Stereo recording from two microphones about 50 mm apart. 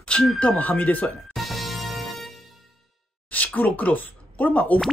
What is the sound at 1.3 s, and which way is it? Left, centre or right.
Music, centre.